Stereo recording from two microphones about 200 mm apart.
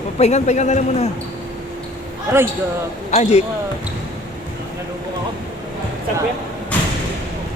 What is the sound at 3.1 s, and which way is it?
Speech, 35° left (ahead or behind).